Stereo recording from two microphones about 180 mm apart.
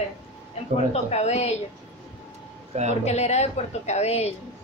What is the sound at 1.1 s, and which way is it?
Speech, 35° left (ahead or behind).